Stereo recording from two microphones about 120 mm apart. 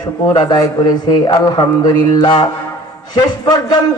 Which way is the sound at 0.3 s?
30° left (ahead or behind).